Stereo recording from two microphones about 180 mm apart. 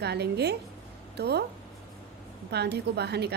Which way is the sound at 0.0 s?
65° right (ahead or behind).